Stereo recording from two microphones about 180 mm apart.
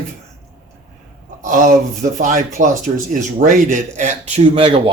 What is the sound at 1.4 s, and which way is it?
Speech, 45° right (ahead or behind).